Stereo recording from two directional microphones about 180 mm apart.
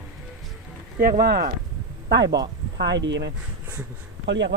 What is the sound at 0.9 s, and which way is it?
Speech, 55° right (ahead or behind).